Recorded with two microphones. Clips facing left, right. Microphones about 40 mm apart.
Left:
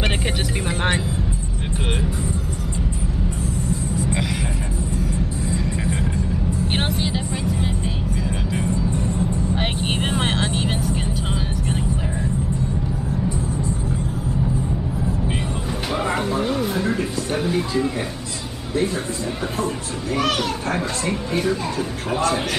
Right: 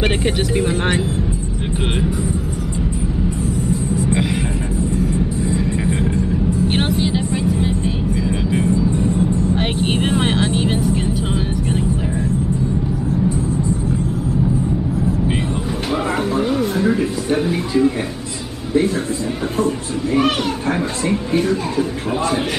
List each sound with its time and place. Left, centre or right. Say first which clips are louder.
0.6 s speech: right 4 dB; centre
5.9 s vehicle: right 5 dB; right
6.7 s music: right 5 dB; centre
8.2 s vehicle: right 6 dB; centre
8.6 s vehicle: right 6 dB; right
9.6 s vehicle: right 5 dB; centre
15.9 s music: right 3 dB; centre
19.6 s a child's voice: right 6 dB; centre
21.1 s speech: right 5 dB; centre